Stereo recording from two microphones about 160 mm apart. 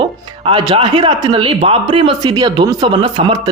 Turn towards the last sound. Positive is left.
turn(degrees=-30)  # may be behind; listen again after turning